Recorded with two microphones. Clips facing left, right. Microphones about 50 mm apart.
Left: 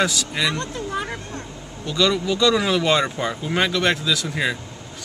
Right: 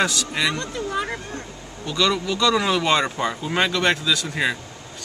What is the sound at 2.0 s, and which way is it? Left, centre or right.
Speech, centre.